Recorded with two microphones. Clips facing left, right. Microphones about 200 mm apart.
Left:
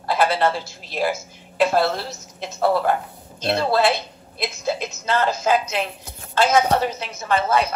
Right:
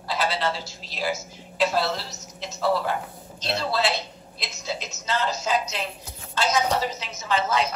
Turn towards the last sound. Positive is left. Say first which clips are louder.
# left 4 dB
turn(degrees=55)  # may be behind; listen again after turning